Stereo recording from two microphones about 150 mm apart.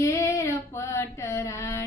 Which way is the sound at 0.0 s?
20° left (ahead or behind).